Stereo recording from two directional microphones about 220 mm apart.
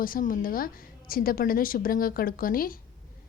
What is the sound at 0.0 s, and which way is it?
A woman's voice, 40° left (ahead or behind).